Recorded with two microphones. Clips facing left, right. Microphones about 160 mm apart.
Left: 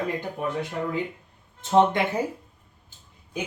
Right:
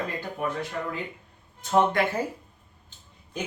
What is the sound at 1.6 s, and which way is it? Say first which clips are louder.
Speech: left 3 dB; 20° left (ahead or behind).